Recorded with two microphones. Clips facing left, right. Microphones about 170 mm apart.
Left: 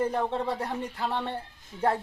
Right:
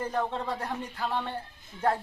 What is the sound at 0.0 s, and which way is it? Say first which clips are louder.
Speech: left 3 dB; 20° left (ahead or behind).